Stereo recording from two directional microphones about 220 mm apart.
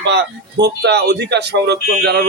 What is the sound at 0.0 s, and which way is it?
Speech, 50° right (ahead or behind).